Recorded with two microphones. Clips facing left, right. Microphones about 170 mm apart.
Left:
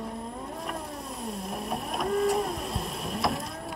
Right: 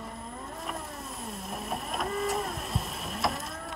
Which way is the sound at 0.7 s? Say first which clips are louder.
Left 3 dB; centre (ahead or behind).